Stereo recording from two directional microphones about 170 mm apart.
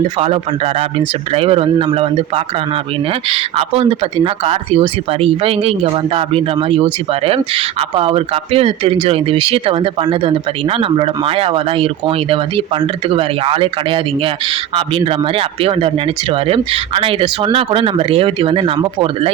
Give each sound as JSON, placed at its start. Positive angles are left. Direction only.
{"t": 0.2, "sound": "speech", "side_deg": -35}